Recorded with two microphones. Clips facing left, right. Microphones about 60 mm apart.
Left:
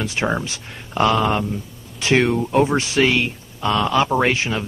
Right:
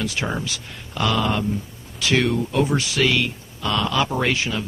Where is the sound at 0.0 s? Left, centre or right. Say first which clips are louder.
Left 3 dB; left.